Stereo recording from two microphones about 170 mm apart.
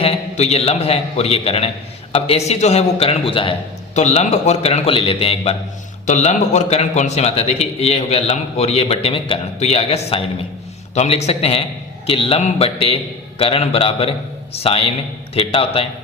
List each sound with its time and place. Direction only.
0.0 s a man's voice: 35° left (ahead or behind)
6.1 s a man's voice: 45° left (ahead or behind)